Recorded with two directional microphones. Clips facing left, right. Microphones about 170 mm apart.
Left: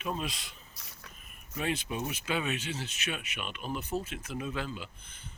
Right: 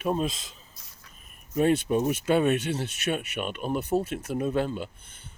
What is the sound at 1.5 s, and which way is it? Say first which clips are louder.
Speech: right 11 dB; 45° right (ahead or behind).